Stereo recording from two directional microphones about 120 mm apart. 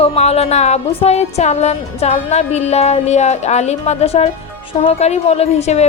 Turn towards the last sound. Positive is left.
turn(degrees=65)  # may be behind; listen again after turning